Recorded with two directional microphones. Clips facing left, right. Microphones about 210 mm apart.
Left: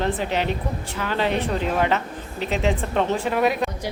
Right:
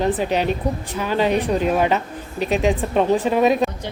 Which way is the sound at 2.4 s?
15° right (ahead or behind).